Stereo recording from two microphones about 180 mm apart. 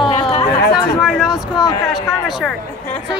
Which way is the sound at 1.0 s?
Centre (ahead or behind).